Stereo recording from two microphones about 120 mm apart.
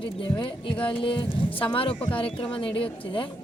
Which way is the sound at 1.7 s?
50° left (ahead or behind).